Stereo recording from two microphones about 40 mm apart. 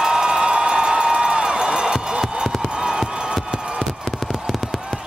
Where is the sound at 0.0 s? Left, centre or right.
Centre.